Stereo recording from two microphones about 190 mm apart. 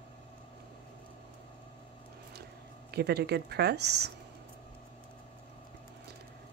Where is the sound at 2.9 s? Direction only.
60° right (ahead or behind).